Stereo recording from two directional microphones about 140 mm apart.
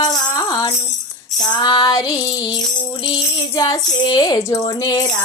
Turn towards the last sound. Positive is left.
turn(degrees=25)  # may be behind; listen again after turning